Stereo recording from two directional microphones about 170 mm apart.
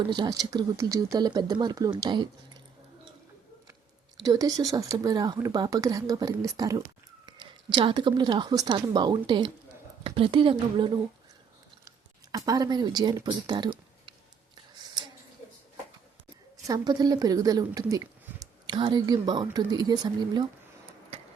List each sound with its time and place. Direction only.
0.1 s a woman's voice: 25° right (ahead or behind)
4.2 s a woman's voice: 20° right (ahead or behind)
16.6 s a woman's voice: 20° right (ahead or behind)